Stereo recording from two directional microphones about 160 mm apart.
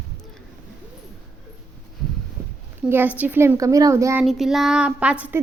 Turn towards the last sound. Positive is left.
turn(degrees=-10)  # may be behind; listen again after turning